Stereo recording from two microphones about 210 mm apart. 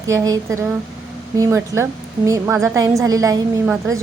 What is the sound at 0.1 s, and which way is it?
A woman's voice, 15° right (ahead or behind).